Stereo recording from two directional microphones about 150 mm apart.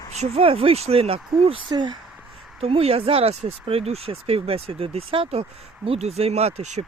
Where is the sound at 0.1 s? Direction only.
45° right (ahead or behind).